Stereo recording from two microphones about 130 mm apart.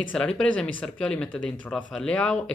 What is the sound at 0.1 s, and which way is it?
Speech, 5° left (ahead or behind).